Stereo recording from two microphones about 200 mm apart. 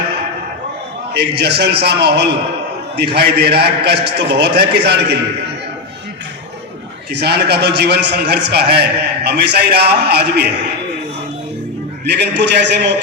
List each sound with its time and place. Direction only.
1.1 s a man's voice: 55° right (ahead or behind)
7.1 s a man's voice: 55° right (ahead or behind)
12.0 s a man's voice: 55° right (ahead or behind)